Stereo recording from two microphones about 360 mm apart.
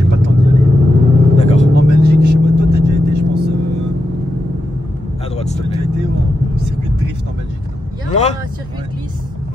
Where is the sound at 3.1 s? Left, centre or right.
Right.